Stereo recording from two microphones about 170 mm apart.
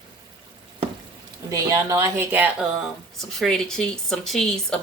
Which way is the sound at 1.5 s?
20° right (ahead or behind).